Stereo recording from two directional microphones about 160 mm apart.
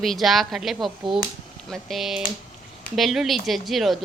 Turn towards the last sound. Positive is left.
turn(degrees=0)  # may be behind; listen again after turning